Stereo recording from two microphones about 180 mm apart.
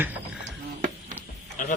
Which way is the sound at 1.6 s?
45° left (ahead or behind).